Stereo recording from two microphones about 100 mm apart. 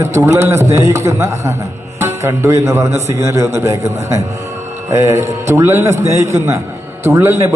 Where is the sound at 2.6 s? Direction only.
30° right (ahead or behind).